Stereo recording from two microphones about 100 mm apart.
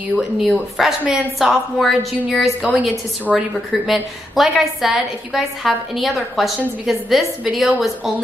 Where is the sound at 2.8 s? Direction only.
10° right (ahead or behind).